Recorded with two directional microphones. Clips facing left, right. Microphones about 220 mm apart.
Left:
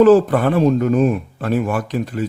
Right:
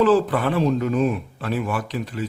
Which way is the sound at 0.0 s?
45° left (ahead or behind).